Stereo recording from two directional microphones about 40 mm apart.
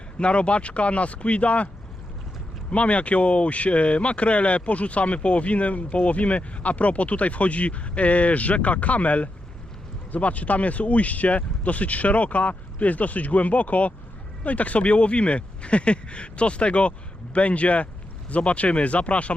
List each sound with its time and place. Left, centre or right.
0.2 s speech: left